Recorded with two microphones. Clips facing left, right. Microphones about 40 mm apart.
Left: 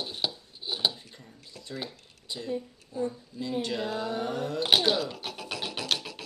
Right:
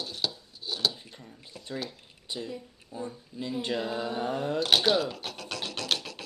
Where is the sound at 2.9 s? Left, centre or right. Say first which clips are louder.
Left 5 dB; right.